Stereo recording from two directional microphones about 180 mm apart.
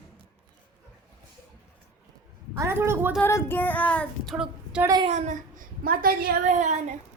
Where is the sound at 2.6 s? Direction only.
15° right (ahead or behind).